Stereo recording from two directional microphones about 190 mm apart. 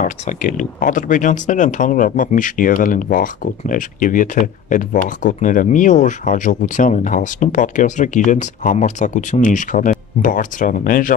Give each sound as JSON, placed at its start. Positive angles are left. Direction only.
{"t": 0.0, "sound": "speech", "side_deg": 40}